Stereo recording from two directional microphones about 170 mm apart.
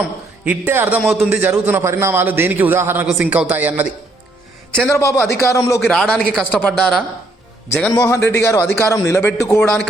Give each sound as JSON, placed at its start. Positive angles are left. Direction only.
{"t": 0.4, "sound": "a man's voice", "side_deg": -10}
{"t": 4.9, "sound": "a man's voice", "side_deg": 15}
{"t": 5.9, "sound": "a man's voice", "side_deg": 5}